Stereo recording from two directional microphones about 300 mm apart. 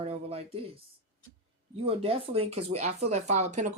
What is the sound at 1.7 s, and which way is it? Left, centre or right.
Speech, centre.